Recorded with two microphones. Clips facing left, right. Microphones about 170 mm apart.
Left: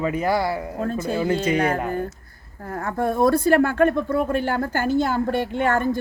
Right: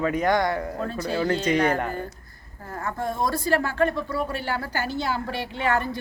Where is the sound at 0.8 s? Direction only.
45° left (ahead or behind).